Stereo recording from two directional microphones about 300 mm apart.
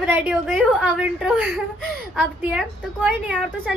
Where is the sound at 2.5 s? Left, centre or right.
Centre.